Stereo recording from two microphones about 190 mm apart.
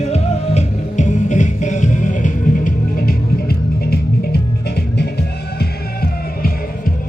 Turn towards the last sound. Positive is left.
turn(degrees=55)  # may be behind; listen again after turning